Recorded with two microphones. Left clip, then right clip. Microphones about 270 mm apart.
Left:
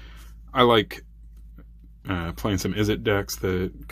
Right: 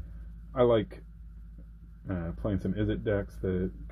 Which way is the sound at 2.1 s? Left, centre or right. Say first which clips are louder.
Left 7 dB; left.